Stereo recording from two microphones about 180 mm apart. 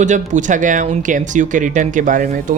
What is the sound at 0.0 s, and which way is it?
Speech, 45° right (ahead or behind).